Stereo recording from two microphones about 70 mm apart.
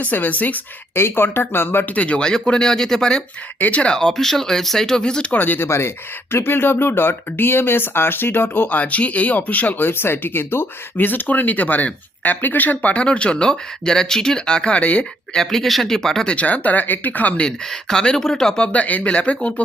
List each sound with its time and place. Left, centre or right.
0.0 s speech: left
1.0 s speech: left
5.6 s speech: left; by 15.4 s centre
15.4 s speech: centre